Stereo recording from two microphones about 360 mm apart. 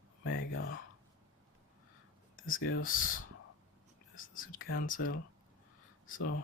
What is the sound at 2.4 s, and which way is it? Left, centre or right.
Speech, left.